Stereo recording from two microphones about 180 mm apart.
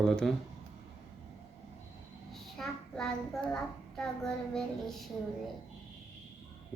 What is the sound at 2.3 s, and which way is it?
A child's voice, centre (ahead or behind).